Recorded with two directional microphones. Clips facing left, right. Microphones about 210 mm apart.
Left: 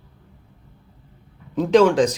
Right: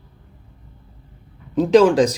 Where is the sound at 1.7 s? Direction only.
35° right (ahead or behind).